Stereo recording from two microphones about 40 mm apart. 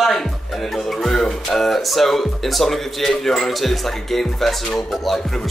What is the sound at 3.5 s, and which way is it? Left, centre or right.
Speech, centre.